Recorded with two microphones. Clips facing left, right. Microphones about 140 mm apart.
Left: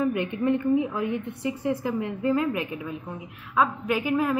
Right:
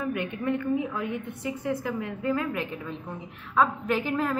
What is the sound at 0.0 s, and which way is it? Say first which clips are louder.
A woman's voice: left 5 dB; 20° left (ahead or behind).